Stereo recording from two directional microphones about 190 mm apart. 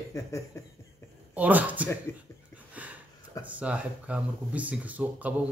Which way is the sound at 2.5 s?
10° right (ahead or behind).